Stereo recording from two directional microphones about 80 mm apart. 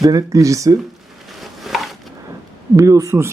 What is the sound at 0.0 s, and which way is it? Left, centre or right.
Speech, right.